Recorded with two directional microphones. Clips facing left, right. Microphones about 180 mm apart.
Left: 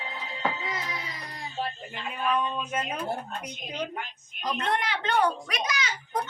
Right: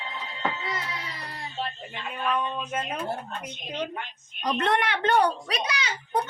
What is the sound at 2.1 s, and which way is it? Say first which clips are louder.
Speech: even; 5° left (ahead or behind).